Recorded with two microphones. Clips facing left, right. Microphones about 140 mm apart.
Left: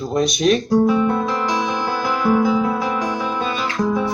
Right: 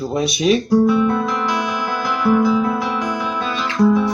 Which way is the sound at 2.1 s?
30° left (ahead or behind).